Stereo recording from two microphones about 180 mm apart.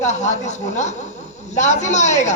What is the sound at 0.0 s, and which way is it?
Speech, 40° left (ahead or behind).